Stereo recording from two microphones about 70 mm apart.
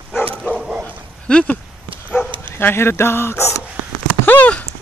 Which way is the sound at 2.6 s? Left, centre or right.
Left.